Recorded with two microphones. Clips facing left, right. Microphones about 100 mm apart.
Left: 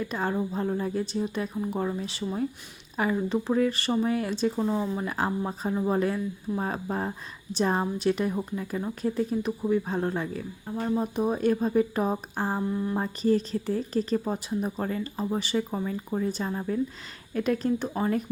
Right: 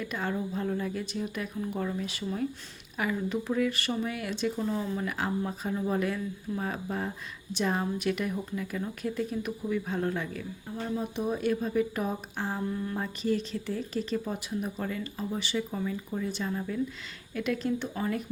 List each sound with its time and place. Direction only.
0.0 s speech: 30° left (ahead or behind)
12.7 s speech: 20° left (ahead or behind)
13.0 s speech: 35° left (ahead or behind)